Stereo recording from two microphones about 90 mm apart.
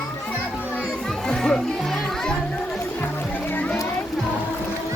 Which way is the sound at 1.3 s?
5° left (ahead or behind).